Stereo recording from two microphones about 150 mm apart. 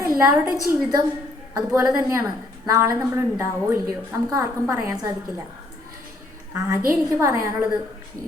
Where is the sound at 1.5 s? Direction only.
20° right (ahead or behind).